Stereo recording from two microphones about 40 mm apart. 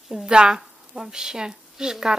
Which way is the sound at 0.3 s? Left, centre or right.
Right.